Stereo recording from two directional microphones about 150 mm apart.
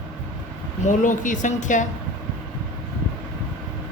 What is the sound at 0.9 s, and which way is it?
Speech, 60° left (ahead or behind).